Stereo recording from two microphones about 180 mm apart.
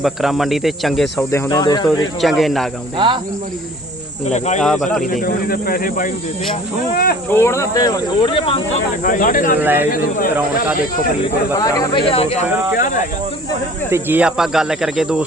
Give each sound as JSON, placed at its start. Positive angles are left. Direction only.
{"t": 0.0, "sound": "speech", "side_deg": 0}
{"t": 1.3, "sound": "speech", "side_deg": 20}
{"t": 1.9, "sound": "speech", "side_deg": 0}
{"t": 4.3, "sound": "speech", "side_deg": 40}
{"t": 4.6, "sound": "speech", "side_deg": 0}
{"t": 5.2, "sound": "speech", "side_deg": 55}
{"t": 7.3, "sound": "speech", "side_deg": 15}
{"t": 9.0, "sound": "speech", "side_deg": 50}
{"t": 9.6, "sound": "speech", "side_deg": -10}
{"t": 9.9, "sound": "speech", "side_deg": 55}
{"t": 11.5, "sound": "speech", "side_deg": 20}
{"t": 12.0, "sound": "speech", "side_deg": 35}
{"t": 12.7, "sound": "speech", "side_deg": 45}
{"t": 13.9, "sound": "speech", "side_deg": -10}